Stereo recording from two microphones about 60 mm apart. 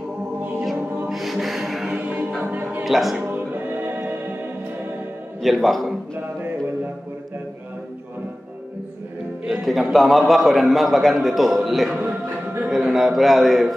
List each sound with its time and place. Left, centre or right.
1.1 s music: centre
2.0 s a capella: right
2.4 s music: right
2.8 s speech: centre
3.2 s music: right
5.4 s a man's voice: centre
9.5 s a man's voice: centre